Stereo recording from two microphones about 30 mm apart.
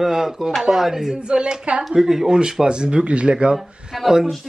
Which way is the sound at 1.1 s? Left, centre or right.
Right.